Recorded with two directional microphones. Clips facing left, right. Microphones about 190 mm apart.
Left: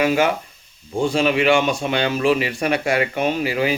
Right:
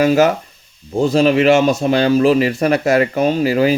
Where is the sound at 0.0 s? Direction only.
40° right (ahead or behind).